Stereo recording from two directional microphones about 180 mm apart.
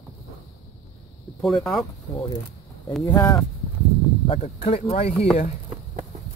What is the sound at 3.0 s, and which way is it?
Speech, 15° left (ahead or behind).